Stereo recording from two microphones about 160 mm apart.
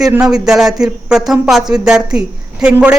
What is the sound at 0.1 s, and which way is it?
A woman's voice, 5° right (ahead or behind).